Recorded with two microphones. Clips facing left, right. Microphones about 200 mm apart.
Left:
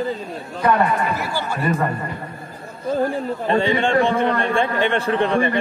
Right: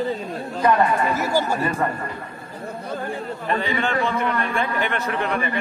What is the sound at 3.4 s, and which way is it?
A man's voice, 30° left (ahead or behind).